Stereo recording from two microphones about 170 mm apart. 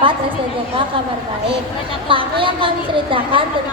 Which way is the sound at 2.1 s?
30° right (ahead or behind).